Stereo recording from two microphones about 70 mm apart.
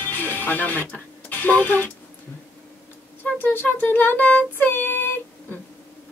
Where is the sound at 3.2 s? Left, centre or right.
Left.